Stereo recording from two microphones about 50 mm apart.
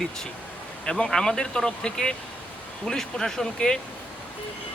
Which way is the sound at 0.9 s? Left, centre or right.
Centre.